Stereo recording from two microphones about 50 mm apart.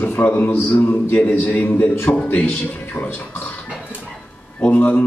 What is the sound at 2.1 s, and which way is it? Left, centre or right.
Speech, centre.